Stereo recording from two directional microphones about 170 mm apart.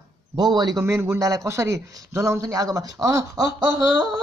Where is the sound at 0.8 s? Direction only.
15° right (ahead or behind).